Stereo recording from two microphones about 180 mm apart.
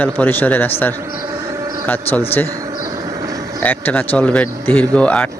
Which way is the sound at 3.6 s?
10° left (ahead or behind).